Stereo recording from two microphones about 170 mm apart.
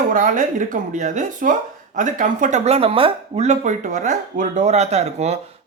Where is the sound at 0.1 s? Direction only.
50° right (ahead or behind).